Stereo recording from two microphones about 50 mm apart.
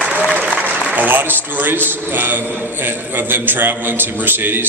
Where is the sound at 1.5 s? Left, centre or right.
Right.